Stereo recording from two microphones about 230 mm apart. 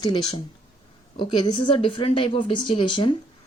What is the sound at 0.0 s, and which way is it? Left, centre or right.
Speech, centre.